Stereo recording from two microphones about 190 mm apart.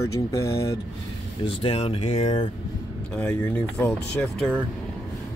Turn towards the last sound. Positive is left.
turn(degrees=0)  # may be behind; listen again after turning